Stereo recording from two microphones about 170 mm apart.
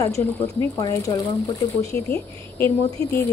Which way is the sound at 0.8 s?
20° left (ahead or behind).